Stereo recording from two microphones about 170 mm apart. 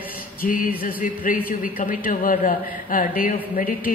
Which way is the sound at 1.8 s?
55° left (ahead or behind).